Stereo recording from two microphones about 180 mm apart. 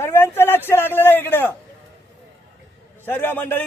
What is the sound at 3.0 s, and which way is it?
Speech, 10° left (ahead or behind).